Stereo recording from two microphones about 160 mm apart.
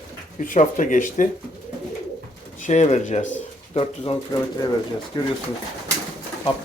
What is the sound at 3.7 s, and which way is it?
Speech, 35° left (ahead or behind).